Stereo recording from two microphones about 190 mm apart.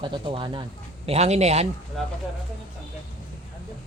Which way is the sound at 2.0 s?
Centre (ahead or behind).